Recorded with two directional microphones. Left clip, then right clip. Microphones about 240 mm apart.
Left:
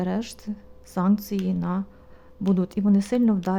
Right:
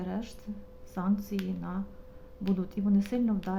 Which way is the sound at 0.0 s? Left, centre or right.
Left.